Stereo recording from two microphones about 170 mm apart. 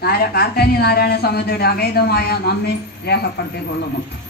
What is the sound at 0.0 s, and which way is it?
Speech, 65° left (ahead or behind).